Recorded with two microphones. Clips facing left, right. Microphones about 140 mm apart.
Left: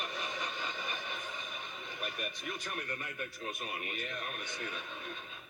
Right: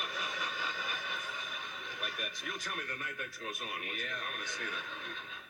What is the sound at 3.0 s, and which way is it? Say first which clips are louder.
Speech: left 1 dB; 20° left (ahead or behind).